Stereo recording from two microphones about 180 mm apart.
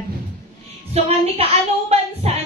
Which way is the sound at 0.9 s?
35° right (ahead or behind).